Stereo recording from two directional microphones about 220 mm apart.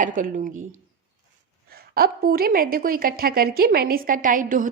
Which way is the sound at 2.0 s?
45° right (ahead or behind).